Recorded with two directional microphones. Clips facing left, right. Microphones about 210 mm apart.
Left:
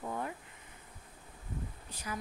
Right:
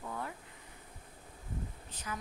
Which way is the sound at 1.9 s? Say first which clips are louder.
Left 2 dB; 10° left (ahead or behind).